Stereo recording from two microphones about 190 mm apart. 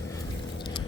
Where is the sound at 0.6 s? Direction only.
25° left (ahead or behind).